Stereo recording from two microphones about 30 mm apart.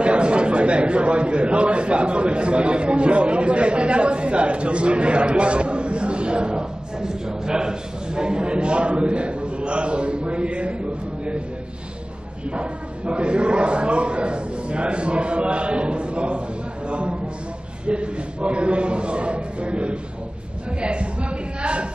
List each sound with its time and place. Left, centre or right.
0.0 s a man's voice: right
12.4 s a man's voice: right